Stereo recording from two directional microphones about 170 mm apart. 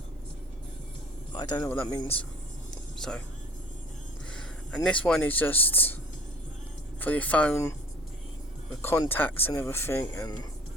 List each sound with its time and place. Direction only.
1.3 s a man's voice: 25° left (ahead or behind)
1.6 s speech: 15° left (ahead or behind)
4.3 s speech: 5° left (ahead or behind)
7.0 s speech: 10° left (ahead or behind)
8.8 s speech: 15° left (ahead or behind)